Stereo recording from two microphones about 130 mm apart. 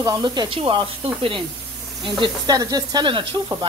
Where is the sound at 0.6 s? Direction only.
45° right (ahead or behind).